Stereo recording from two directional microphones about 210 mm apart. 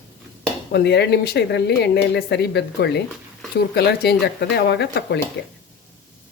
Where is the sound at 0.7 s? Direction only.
50° left (ahead or behind).